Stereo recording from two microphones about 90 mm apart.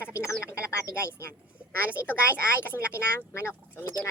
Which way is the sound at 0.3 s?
30° left (ahead or behind).